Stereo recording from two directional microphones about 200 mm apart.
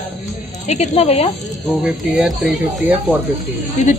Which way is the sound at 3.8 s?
35° left (ahead or behind).